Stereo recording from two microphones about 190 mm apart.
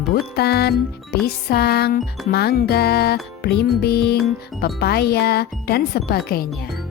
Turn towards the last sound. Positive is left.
turn(degrees=50)  # may be behind; listen again after turning